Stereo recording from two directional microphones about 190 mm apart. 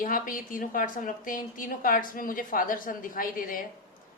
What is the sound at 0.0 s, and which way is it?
A woman's voice, 45° left (ahead or behind).